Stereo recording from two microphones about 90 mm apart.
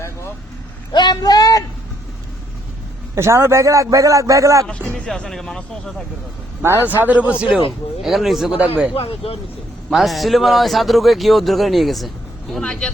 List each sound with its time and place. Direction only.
0.9 s a sound: 50° left (ahead or behind)
3.2 s a man's voice: 30° right (ahead or behind)
4.9 s speech: 10° left (ahead or behind)
6.6 s speech: 25° right (ahead or behind); by 8.6 s 5° right (ahead or behind)
9.0 s speech: 90° left
9.9 s speech: centre (ahead or behind)